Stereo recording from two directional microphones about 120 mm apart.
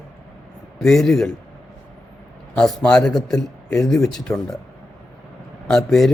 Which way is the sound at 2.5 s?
5° left (ahead or behind).